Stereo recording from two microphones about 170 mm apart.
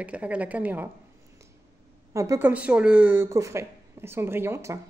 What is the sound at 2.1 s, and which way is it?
A woman's voice, 15° right (ahead or behind).